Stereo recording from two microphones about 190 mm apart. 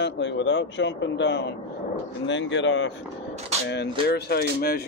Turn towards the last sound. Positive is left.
turn(degrees=55)  # may be behind; listen again after turning